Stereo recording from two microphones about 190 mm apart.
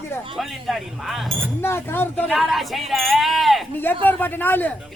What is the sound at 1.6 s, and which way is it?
Speech, 10° left (ahead or behind).